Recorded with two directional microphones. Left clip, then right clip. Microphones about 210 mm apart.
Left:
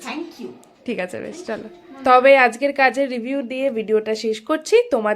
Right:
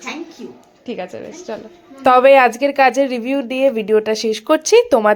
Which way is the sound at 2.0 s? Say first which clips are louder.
Right 3 dB; 10° right (ahead or behind).